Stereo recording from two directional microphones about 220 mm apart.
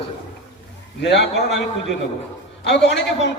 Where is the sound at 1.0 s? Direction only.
55° left (ahead or behind).